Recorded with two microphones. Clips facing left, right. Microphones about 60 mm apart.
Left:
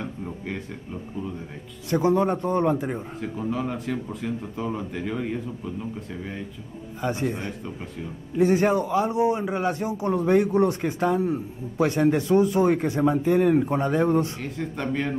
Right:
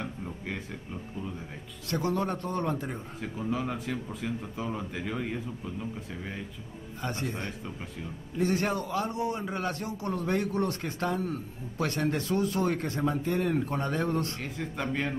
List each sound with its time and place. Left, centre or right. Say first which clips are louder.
1.9 s a man's voice: left 8 dB; left
3.2 s speech: left 1 dB; centre
7.0 s a man's voice: left 7 dB; centre
14.4 s speech: left 4 dB; centre